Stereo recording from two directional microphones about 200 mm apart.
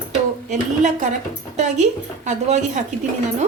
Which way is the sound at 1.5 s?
35° right (ahead or behind).